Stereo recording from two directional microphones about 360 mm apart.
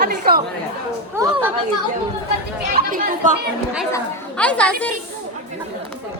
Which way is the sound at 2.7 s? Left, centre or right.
Right.